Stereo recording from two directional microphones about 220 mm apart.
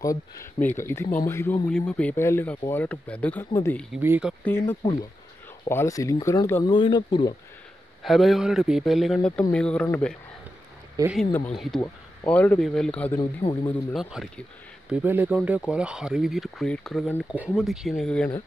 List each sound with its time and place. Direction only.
0.0 s speech: 15° left (ahead or behind)
3.9 s speech: 5° right (ahead or behind)
4.5 s speech: 10° left (ahead or behind)
8.0 s speech: centre (ahead or behind)
11.0 s speech: 15° right (ahead or behind)
11.5 s speech: centre (ahead or behind)
13.2 s a man's voice: 20° left (ahead or behind)
13.7 s speech: centre (ahead or behind)